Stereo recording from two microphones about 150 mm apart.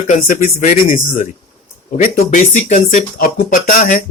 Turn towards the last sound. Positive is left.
turn(degrees=65)  # may be behind; listen again after turning